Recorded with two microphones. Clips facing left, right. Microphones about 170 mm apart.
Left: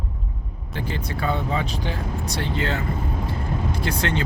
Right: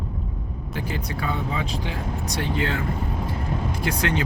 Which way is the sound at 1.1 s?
35° left (ahead or behind).